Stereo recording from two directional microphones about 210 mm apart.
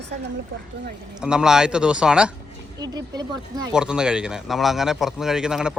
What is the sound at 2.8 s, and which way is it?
Speech, 20° right (ahead or behind).